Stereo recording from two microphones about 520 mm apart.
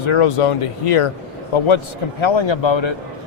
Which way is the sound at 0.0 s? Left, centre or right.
Left.